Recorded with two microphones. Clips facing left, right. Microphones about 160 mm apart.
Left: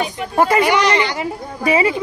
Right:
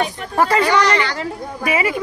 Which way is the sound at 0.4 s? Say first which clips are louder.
Left 1 dB; 15° left (ahead or behind).